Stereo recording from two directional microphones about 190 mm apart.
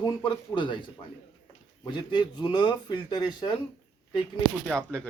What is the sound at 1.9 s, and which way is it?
Speech, 25° left (ahead or behind).